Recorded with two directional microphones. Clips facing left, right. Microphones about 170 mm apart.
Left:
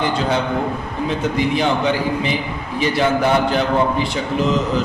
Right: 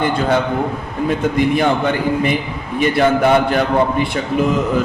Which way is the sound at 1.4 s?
55° right (ahead or behind).